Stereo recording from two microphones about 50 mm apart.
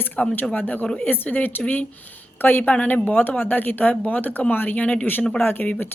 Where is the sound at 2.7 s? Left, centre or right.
Left.